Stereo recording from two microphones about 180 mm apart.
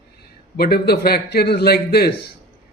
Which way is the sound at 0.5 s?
60° left (ahead or behind).